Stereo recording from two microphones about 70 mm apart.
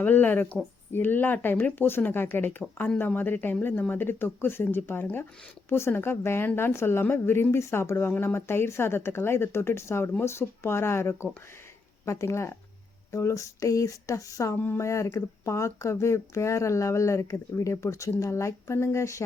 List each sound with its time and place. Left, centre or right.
0.0 s speech: left